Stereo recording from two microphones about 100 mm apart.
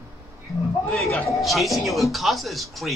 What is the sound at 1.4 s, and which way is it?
Speech, centre (ahead or behind).